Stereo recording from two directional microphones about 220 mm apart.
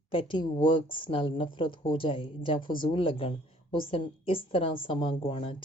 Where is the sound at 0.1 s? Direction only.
25° left (ahead or behind).